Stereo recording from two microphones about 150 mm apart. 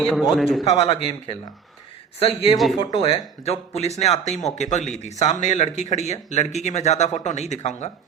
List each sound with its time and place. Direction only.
0.0 s a man's voice: centre (ahead or behind)
0.7 s speech: 40° left (ahead or behind)